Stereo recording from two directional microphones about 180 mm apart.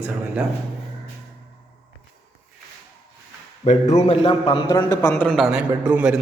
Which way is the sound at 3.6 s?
40° left (ahead or behind).